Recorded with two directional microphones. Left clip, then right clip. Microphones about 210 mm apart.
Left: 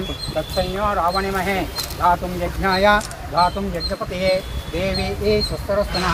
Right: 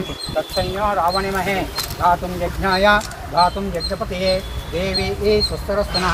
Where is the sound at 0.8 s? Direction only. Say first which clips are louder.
Right 2 dB; 15° right (ahead or behind).